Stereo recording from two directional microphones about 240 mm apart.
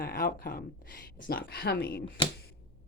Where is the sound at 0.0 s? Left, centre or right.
Left.